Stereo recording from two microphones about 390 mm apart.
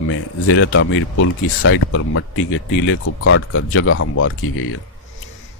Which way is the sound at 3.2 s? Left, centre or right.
Left.